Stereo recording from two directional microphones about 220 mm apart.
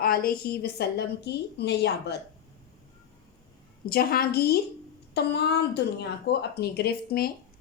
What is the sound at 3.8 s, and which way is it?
Speech, 45° left (ahead or behind).